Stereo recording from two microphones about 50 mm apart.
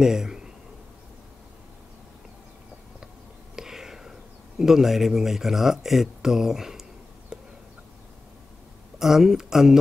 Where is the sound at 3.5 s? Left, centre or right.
Centre.